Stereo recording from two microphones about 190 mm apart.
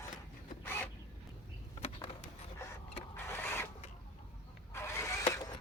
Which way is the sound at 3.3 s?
15° left (ahead or behind).